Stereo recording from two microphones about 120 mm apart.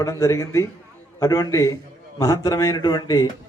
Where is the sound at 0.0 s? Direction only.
25° left (ahead or behind).